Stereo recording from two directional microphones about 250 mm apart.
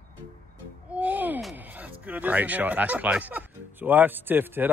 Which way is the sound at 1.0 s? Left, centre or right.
Centre.